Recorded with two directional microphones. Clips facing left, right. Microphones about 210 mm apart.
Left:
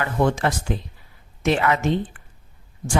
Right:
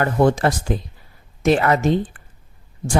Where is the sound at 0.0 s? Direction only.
40° right (ahead or behind).